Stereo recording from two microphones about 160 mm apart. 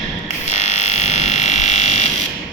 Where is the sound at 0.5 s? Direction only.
45° left (ahead or behind).